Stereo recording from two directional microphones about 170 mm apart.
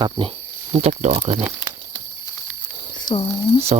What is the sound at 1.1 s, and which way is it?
Speech, 30° right (ahead or behind).